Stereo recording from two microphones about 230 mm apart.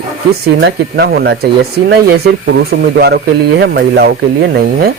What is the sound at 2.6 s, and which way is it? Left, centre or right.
Speech, right.